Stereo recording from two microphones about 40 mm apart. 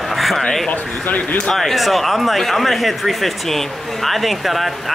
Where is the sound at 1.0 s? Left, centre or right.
Left.